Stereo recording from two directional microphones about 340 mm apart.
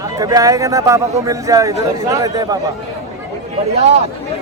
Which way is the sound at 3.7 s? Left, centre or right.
Centre.